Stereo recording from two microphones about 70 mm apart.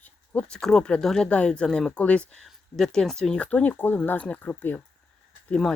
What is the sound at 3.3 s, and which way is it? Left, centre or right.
Speech, left.